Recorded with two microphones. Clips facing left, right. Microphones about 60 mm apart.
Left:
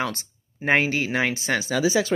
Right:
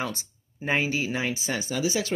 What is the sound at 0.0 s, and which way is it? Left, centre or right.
Speech, left.